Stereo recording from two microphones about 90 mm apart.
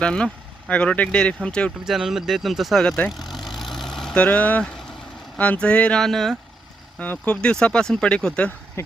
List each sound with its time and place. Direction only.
0.0 s speech: 10° left (ahead or behind)
1.8 s speech: 5° right (ahead or behind)
4.2 s speech: 15° left (ahead or behind)
7.0 s speech: 15° left (ahead or behind)